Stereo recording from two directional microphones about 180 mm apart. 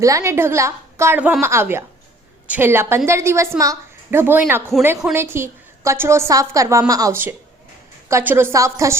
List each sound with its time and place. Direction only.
0.0 s a woman's voice: 15° right (ahead or behind)